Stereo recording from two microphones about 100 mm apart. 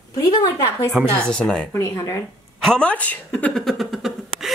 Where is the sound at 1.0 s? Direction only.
15° right (ahead or behind).